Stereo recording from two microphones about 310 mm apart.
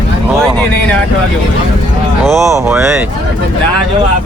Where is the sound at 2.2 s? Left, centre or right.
Centre.